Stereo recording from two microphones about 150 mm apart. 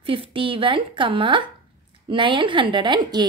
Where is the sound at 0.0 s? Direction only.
35° right (ahead or behind).